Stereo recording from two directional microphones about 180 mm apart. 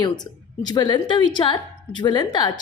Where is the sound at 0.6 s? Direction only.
25° left (ahead or behind).